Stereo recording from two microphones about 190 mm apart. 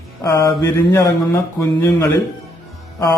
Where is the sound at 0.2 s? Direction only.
15° left (ahead or behind).